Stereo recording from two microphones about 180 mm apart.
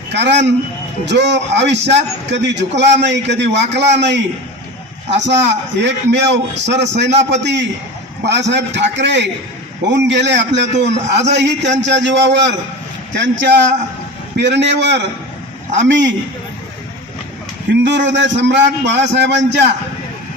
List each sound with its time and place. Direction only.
0.1 s a man's voice: 70° right (ahead or behind)
14.3 s a man's voice: 70° right (ahead or behind)
15.8 s a man's voice: 90° right
17.8 s a man's voice: 80° right